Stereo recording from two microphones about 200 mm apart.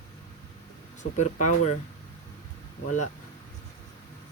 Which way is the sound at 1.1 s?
35° left (ahead or behind).